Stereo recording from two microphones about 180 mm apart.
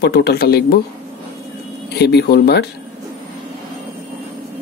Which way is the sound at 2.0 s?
65° left (ahead or behind).